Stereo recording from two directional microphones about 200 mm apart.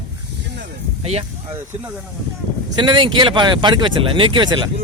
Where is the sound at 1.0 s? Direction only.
30° right (ahead or behind).